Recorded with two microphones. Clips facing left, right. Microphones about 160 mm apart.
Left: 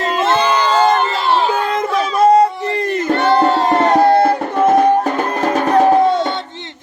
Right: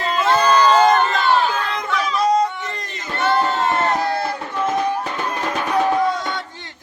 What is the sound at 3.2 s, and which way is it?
Music, 35° left (ahead or behind).